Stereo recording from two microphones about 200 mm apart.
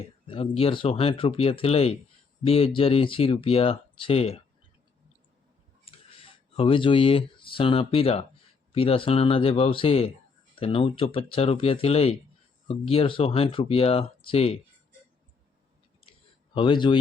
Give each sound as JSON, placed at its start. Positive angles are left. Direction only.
{"t": 0.3, "sound": "speech", "side_deg": 25}
{"t": 5.8, "sound": "a sound", "side_deg": 25}
{"t": 8.7, "sound": "speech", "side_deg": 30}
{"t": 16.6, "sound": "speech", "side_deg": 25}